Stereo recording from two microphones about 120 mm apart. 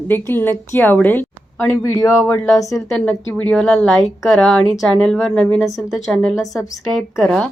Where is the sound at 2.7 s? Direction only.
Centre (ahead or behind).